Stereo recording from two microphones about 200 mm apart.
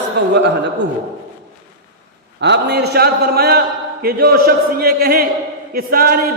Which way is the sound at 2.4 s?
55° right (ahead or behind).